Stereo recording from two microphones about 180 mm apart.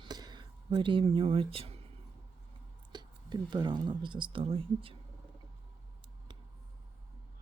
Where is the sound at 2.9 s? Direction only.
25° right (ahead or behind).